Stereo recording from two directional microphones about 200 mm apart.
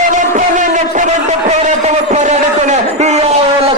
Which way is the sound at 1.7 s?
35° right (ahead or behind).